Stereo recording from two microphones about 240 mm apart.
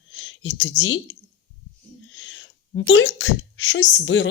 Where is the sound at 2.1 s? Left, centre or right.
Left.